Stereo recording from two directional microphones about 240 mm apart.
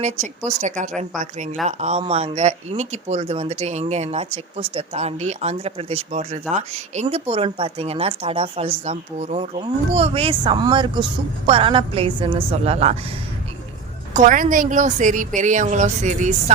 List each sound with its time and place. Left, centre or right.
0.6 s a woman's voice: right
14.1 s a woman's voice: right